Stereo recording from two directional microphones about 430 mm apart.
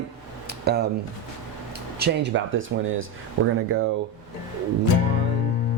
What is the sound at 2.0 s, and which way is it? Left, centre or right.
Speech, right.